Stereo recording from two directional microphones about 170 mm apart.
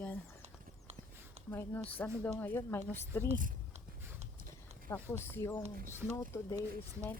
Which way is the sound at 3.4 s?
50° right (ahead or behind).